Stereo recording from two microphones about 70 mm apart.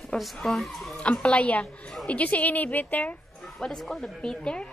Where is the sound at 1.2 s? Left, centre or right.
Centre.